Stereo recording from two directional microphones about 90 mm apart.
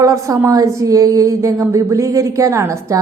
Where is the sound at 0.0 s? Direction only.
35° right (ahead or behind).